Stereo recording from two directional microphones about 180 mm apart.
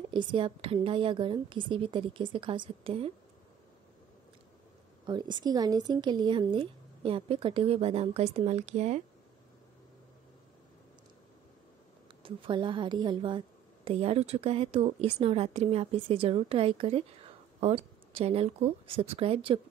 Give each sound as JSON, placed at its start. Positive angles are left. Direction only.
{"t": 0.1, "sound": "speech", "side_deg": -25}
{"t": 5.0, "sound": "speech", "side_deg": -25}
{"t": 12.2, "sound": "a woman's voice", "side_deg": -30}